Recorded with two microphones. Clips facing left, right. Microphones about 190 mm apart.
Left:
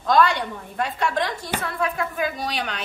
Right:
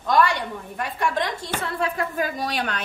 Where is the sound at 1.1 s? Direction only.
20° right (ahead or behind).